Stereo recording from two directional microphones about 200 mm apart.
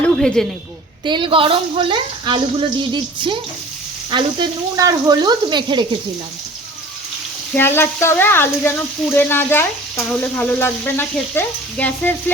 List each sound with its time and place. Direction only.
0.2 s a woman's voice: centre (ahead or behind)
1.0 s speech: 25° right (ahead or behind)
7.5 s speech: 10° left (ahead or behind)